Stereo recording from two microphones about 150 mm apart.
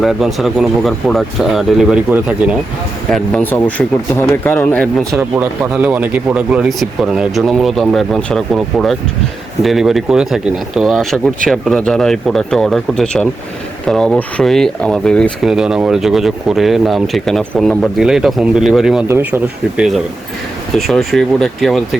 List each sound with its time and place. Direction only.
0.0 s speech: centre (ahead or behind)
3.1 s speech: 5° left (ahead or behind)
5.3 s speech: 10° right (ahead or behind)
19.0 s speech: 15° right (ahead or behind); by 21.8 s centre (ahead or behind)